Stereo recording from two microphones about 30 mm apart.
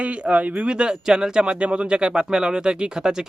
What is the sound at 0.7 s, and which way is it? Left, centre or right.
Speech, right.